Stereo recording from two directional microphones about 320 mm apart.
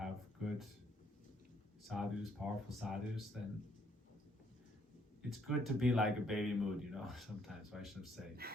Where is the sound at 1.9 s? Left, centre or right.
Centre.